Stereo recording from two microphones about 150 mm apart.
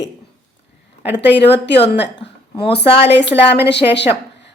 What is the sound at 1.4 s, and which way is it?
A woman's voice, 40° left (ahead or behind).